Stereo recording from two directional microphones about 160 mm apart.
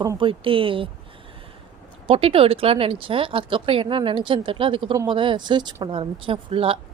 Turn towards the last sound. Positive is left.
turn(degrees=-35)  # may be behind; listen again after turning